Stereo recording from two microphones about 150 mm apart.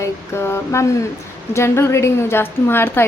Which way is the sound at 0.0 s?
15° left (ahead or behind).